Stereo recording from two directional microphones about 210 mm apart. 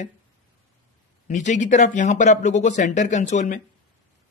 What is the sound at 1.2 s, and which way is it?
A man's voice, 35° left (ahead or behind).